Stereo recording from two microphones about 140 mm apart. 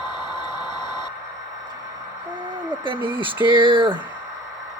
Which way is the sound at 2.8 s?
35° right (ahead or behind).